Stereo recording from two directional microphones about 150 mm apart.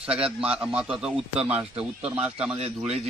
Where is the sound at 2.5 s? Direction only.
45° right (ahead or behind).